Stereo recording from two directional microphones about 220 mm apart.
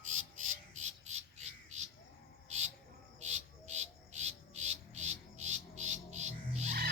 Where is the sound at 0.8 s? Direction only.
30° right (ahead or behind).